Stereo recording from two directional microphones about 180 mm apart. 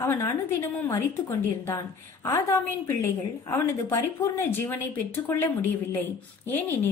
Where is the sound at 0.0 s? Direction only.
15° left (ahead or behind).